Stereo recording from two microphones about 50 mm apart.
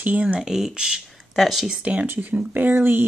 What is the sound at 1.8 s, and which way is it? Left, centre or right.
Speech, right.